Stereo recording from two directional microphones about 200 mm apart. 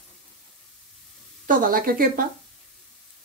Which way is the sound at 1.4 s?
45° right (ahead or behind).